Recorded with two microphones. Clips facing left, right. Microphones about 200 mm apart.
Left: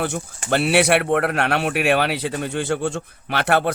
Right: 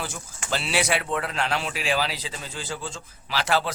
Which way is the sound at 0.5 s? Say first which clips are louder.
Left 9 dB; 60° left (ahead or behind).